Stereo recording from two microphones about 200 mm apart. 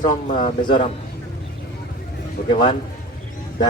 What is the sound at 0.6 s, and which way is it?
Speech, 25° left (ahead or behind).